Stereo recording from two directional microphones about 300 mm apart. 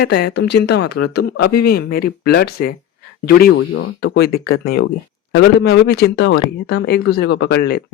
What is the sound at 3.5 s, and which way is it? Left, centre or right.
Speech, left.